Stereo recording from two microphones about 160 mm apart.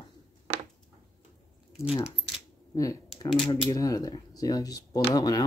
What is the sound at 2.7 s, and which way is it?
Speech, 20° left (ahead or behind).